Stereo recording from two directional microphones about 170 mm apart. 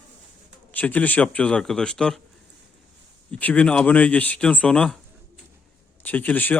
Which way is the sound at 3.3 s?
10° left (ahead or behind).